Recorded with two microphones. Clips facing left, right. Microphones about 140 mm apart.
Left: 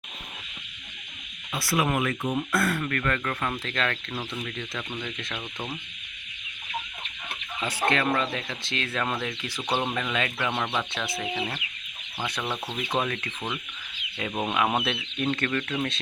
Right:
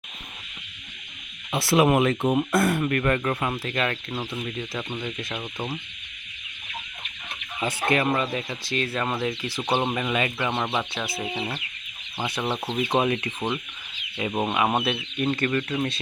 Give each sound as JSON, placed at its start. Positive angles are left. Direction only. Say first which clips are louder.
{"t": 1.5, "sound": "speech", "louder": "right 6 dB", "side_deg": -25}
{"t": 3.5, "sound": "speech", "louder": "right 3 dB", "side_deg": -10}
{"t": 7.9, "sound": "speech", "louder": "right 2 dB", "side_deg": -10}
{"t": 14.5, "sound": "speech", "louder": "even", "side_deg": -5}